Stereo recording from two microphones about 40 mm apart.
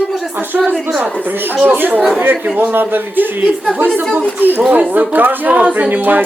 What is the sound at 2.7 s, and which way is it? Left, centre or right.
A woman's voice, right.